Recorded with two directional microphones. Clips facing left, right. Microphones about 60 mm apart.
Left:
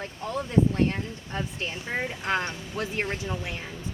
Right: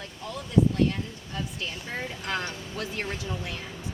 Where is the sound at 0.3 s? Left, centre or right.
Left.